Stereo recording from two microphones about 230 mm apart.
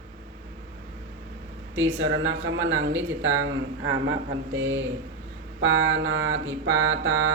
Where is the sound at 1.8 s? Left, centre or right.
Right.